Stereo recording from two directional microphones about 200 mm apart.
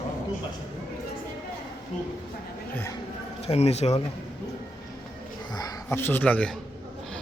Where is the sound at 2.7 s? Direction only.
10° left (ahead or behind).